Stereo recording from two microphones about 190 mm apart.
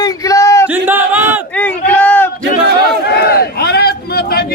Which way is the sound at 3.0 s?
55° left (ahead or behind).